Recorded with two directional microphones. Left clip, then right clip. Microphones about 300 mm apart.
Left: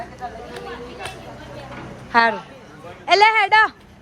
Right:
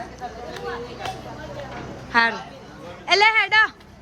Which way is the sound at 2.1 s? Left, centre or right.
Centre.